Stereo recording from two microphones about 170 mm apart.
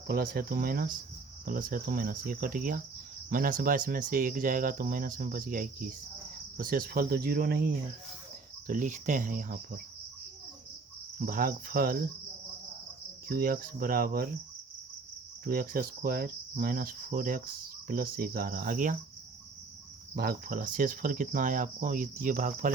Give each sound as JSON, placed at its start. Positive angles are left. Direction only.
{"t": 0.1, "sound": "cricket", "side_deg": -60}
{"t": 3.2, "sound": "speech", "side_deg": -55}
{"t": 6.6, "sound": "cricket", "side_deg": -60}
{"t": 8.6, "sound": "speech", "side_deg": -50}
{"t": 11.3, "sound": "cricket", "side_deg": -55}
{"t": 13.2, "sound": "cricket", "side_deg": -60}
{"t": 15.4, "sound": "cricket", "side_deg": -60}
{"t": 20.1, "sound": "speech", "side_deg": -55}